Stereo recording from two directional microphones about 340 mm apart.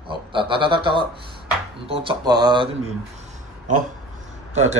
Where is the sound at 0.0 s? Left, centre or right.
Centre.